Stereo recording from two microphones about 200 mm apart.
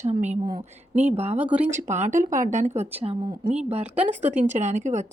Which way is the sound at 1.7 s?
35° right (ahead or behind).